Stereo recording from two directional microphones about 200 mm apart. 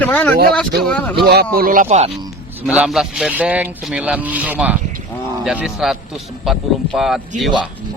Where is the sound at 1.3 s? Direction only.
50° right (ahead or behind); by 2.2 s 35° right (ahead or behind).